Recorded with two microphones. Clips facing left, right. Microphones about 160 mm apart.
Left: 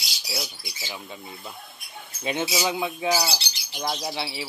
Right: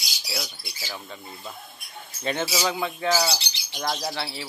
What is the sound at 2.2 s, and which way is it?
Speech, 15° left (ahead or behind).